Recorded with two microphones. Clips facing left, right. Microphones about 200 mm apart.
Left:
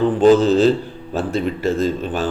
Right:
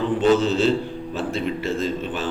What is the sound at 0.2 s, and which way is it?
A man's voice, 35° left (ahead or behind).